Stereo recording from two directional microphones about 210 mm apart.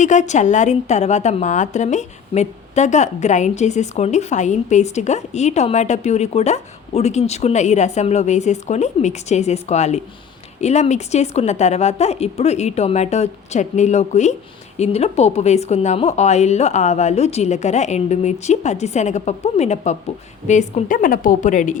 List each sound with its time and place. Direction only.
0.0 s a woman's voice: 35° left (ahead or behind)